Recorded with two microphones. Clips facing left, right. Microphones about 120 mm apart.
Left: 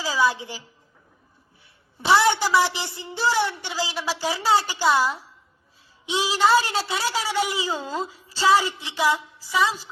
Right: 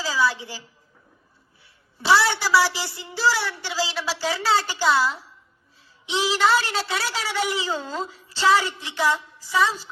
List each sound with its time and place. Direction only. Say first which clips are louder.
0.0 s a woman's voice: left 1 dB; 15° left (ahead or behind)
2.0 s a woman's voice: left 1 dB; 20° left (ahead or behind)